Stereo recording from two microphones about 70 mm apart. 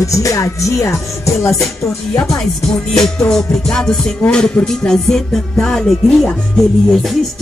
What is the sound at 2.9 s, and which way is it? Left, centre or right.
Music, centre.